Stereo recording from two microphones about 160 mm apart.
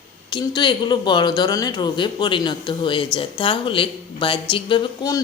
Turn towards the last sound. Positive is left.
turn(degrees=20)  # may be behind; listen again after turning